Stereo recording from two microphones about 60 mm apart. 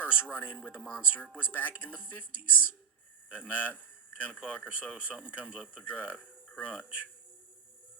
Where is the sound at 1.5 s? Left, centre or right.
Left.